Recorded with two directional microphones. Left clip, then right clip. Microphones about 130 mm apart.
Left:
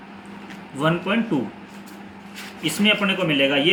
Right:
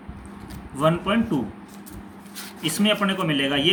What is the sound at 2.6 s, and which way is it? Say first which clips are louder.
A man's voice: left 2 dB; 45° right (ahead or behind).